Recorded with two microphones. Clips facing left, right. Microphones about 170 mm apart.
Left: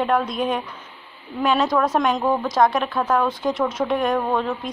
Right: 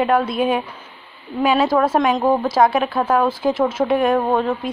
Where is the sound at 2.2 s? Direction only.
30° right (ahead or behind).